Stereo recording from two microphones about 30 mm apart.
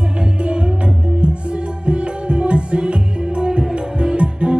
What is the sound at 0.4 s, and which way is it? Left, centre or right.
Music, right.